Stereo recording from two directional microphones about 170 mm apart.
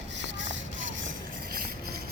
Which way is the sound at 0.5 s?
90° right.